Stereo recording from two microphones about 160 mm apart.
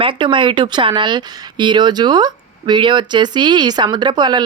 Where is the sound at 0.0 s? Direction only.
30° right (ahead or behind).